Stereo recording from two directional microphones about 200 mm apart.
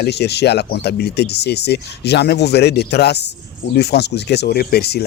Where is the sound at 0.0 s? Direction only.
55° left (ahead or behind).